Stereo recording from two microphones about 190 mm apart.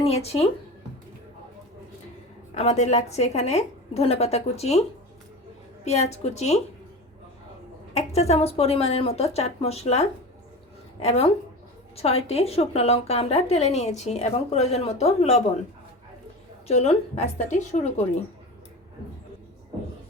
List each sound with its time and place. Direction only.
0.0 s a woman's voice: 30° left (ahead or behind)
2.6 s a woman's voice: 35° left (ahead or behind)
7.9 s a woman's voice: 35° left (ahead or behind)
16.6 s a woman's voice: 35° left (ahead or behind)